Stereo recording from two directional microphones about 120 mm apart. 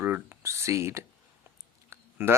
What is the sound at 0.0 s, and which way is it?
Speech, 20° right (ahead or behind).